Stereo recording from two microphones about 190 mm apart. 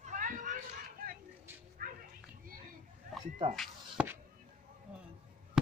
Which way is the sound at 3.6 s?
5° right (ahead or behind).